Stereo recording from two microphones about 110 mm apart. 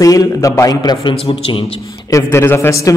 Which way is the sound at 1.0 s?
60° left (ahead or behind).